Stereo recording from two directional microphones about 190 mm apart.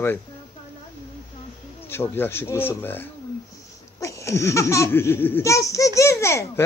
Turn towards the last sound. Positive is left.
turn(degrees=15)  # may be behind; listen again after turning